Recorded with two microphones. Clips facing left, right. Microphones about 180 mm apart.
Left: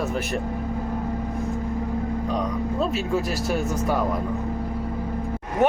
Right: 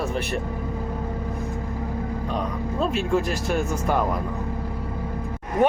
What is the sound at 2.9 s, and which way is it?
Speech, 5° left (ahead or behind).